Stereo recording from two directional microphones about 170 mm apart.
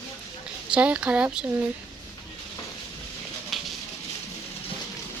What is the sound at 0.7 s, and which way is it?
Speech, 5° right (ahead or behind).